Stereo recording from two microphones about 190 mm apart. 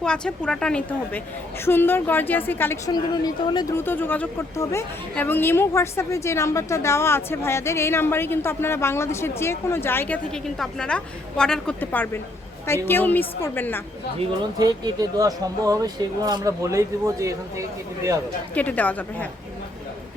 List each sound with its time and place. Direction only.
0.0 s a woman's voice: 5° left (ahead or behind)
14.2 s speech: 20° right (ahead or behind)
18.5 s a woman's voice: 10° left (ahead or behind)